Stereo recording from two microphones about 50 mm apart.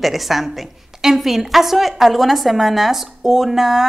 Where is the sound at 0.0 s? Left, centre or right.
Centre.